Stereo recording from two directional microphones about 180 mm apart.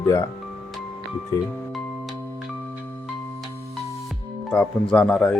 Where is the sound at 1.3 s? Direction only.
25° left (ahead or behind).